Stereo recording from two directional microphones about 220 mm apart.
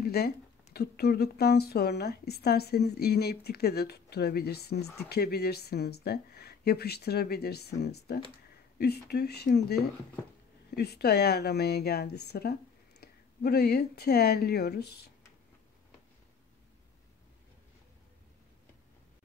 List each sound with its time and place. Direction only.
0.0 s a sound: 45° left (ahead or behind)
0.7 s a woman's voice: 45° left (ahead or behind)
10.8 s a woman's voice: 45° left (ahead or behind)